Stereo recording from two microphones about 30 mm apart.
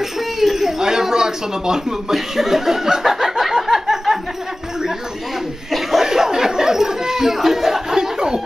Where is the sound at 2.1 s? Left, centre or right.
Centre.